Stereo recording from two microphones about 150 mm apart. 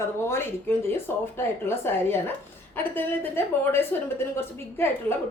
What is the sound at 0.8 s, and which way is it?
A woman's voice, 15° left (ahead or behind).